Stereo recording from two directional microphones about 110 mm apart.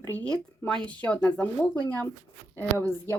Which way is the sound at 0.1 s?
15° left (ahead or behind).